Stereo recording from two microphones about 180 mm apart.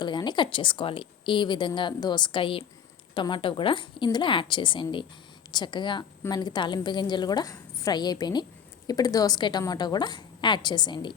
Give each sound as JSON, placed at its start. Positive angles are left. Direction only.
{"t": 0.0, "sound": "a woman's voice", "side_deg": 25}